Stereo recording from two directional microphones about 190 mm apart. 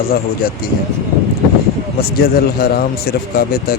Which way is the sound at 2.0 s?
55° left (ahead or behind).